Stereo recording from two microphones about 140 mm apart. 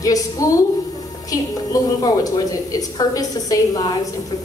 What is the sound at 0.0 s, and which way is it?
A woman's voice, 25° left (ahead or behind).